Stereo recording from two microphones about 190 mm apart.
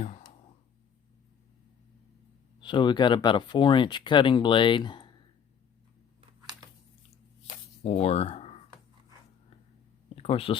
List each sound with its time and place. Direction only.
2.6 s speech: 25° left (ahead or behind)
7.9 s speech: 35° left (ahead or behind)
10.2 s speech: 30° left (ahead or behind)